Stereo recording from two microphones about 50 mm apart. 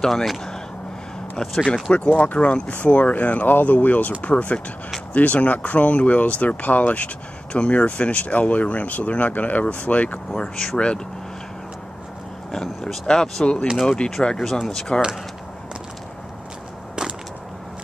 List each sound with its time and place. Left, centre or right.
0.0 s speech: centre
1.6 s speech: left
10.5 s speech: centre
12.4 s speech: centre